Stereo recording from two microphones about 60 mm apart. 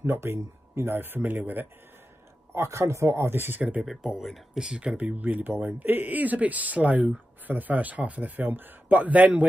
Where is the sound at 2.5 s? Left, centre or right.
Right.